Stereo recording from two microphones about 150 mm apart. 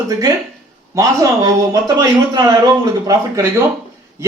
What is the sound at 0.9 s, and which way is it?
A man's voice, 25° right (ahead or behind).